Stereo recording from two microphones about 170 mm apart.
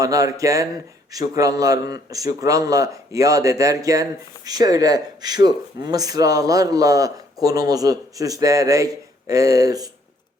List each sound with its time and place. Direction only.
0.0 s a man's voice: 20° right (ahead or behind)